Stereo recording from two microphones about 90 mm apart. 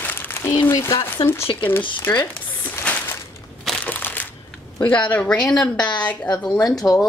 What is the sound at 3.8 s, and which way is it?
Crushing, 20° left (ahead or behind).